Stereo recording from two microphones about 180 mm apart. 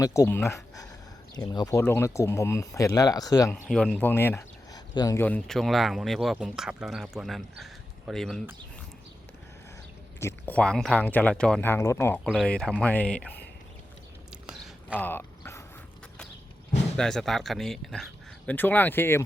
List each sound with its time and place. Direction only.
0.0 s speech: 15° left (ahead or behind)
3.7 s speech: 5° left (ahead or behind)
10.2 s speech: 15° left (ahead or behind)
14.4 s a sound: 5° right (ahead or behind)
14.9 s mechanisms: 10° left (ahead or behind)
17.0 s speech: centre (ahead or behind)